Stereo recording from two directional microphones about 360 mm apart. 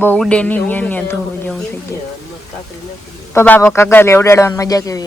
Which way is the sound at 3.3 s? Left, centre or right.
Centre.